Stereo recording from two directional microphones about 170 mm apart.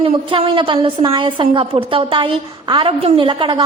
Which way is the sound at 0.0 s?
30° right (ahead or behind).